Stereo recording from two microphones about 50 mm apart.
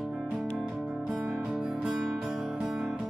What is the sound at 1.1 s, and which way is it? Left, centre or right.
Music, right.